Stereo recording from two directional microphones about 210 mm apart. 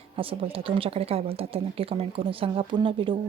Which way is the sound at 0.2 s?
25° right (ahead or behind).